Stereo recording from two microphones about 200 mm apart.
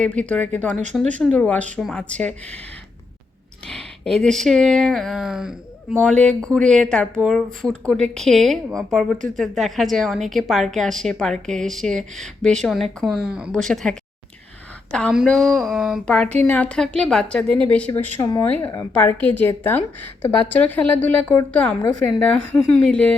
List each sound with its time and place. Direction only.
0.0 s a woman's voice: 5° left (ahead or behind)
3.7 s speech: centre (ahead or behind)
14.9 s a woman's voice: centre (ahead or behind)